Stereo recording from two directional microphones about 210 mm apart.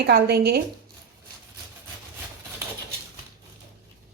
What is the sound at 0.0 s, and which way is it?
Speech, 50° right (ahead or behind).